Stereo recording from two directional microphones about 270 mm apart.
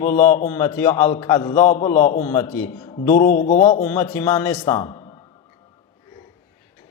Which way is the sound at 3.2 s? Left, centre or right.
Left.